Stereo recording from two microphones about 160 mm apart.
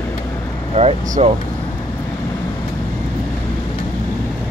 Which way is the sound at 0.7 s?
45° right (ahead or behind).